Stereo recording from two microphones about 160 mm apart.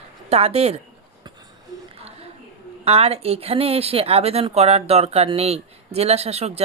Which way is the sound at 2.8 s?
40° right (ahead or behind).